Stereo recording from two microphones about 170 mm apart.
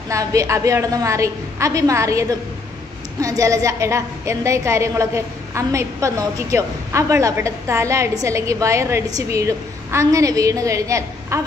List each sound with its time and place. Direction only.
0.1 s a woman's voice: 20° right (ahead or behind)